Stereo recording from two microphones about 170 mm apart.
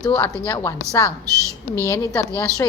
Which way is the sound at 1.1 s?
20° right (ahead or behind).